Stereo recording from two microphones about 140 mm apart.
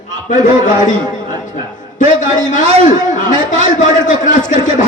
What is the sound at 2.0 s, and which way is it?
A man's voice, 65° left (ahead or behind).